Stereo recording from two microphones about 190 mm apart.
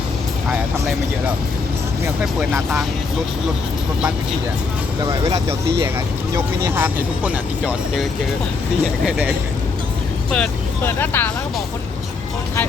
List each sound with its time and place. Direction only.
2.2 s speech: 5° right (ahead or behind)
5.2 s speech: 20° right (ahead or behind)
9.0 s speech: 5° right (ahead or behind)
10.3 s speech: 5° left (ahead or behind)